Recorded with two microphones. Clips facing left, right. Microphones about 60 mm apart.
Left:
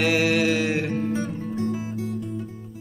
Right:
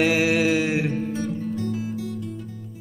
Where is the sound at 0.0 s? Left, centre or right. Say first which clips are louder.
Right 1 dB; centre.